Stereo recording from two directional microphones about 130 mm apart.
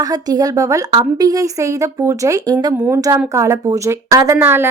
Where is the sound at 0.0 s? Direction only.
30° right (ahead or behind).